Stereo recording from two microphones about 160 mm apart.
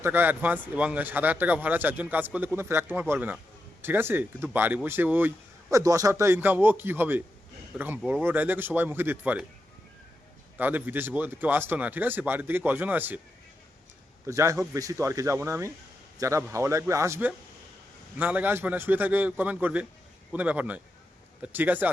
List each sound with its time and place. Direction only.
0.0 s speech: 15° right (ahead or behind)
10.6 s speech: 10° right (ahead or behind)
14.3 s a man's voice: 20° right (ahead or behind)